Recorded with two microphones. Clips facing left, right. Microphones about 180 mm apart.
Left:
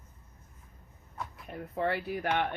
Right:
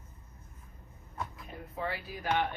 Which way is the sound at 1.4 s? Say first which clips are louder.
Left 7 dB; 60° left (ahead or behind).